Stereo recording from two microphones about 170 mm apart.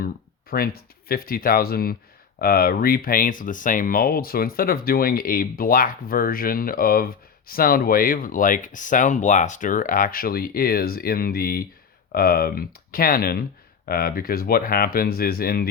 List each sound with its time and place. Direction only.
0.5 s speech: 60° left (ahead or behind)